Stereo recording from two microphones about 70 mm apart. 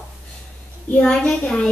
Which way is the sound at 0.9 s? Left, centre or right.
Left.